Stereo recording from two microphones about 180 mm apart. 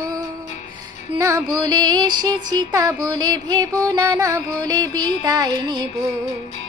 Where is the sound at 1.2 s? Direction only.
15° right (ahead or behind).